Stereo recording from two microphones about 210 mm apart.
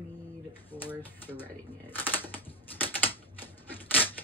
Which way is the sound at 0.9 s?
10° left (ahead or behind).